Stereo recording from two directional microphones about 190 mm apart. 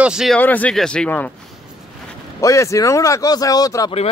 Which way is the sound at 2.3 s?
15° left (ahead or behind).